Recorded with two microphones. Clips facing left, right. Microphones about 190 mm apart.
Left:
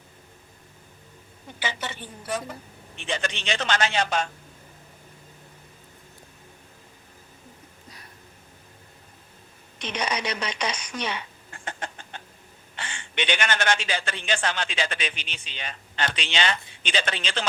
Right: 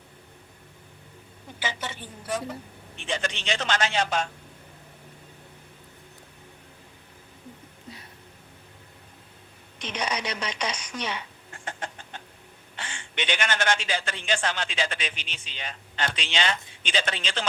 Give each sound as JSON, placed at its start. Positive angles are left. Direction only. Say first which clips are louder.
{"t": 1.5, "sound": "a man's voice", "louder": "left 1 dB", "side_deg": 70}
{"t": 9.8, "sound": "a man's voice", "louder": "left 2 dB", "side_deg": 70}
{"t": 12.7, "sound": "a man's voice", "louder": "left 3 dB", "side_deg": 70}